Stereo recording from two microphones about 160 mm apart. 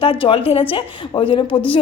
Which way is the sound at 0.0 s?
35° left (ahead or behind).